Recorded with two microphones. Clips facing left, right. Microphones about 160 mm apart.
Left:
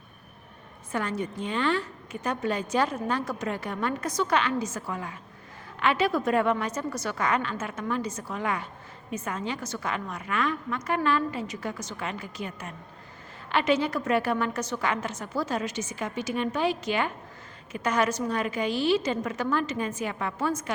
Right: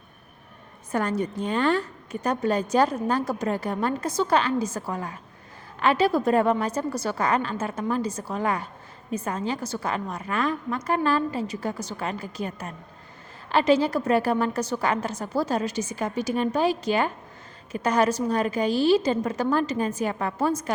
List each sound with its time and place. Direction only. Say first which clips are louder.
0.9 s a woman's voice: right 4 dB; 40° right (ahead or behind)